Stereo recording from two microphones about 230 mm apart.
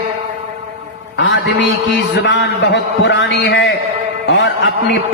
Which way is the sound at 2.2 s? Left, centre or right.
Left.